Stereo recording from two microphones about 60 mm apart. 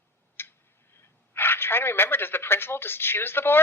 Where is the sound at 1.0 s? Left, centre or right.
Left.